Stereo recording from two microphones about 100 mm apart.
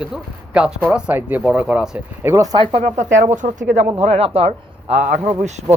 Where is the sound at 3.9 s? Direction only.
90° right.